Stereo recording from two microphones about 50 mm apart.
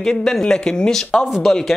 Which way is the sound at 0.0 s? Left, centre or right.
Centre.